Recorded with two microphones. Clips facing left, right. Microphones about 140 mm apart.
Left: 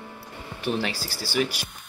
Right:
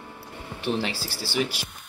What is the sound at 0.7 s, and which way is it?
Speech, 25° right (ahead or behind).